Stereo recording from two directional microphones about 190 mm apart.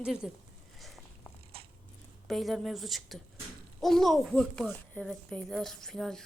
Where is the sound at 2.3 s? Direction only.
Centre (ahead or behind).